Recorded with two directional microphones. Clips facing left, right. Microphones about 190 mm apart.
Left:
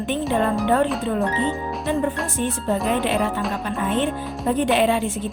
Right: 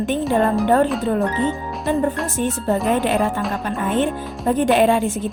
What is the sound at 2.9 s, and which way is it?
Speech, 45° right (ahead or behind).